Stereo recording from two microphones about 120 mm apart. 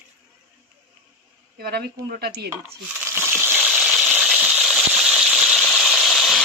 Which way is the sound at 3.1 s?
20° right (ahead or behind).